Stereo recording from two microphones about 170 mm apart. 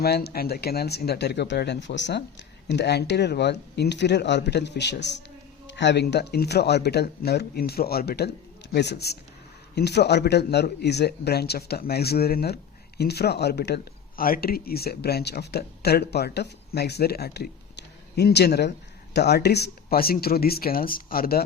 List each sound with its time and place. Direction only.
0.0 s speech: 70° left (ahead or behind); by 2.2 s 90° left
2.6 s speech: 75° left (ahead or behind)